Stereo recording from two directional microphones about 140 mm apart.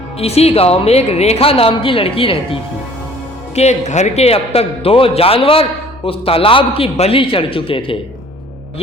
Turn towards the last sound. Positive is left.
turn(degrees=40)  # may be behind; listen again after turning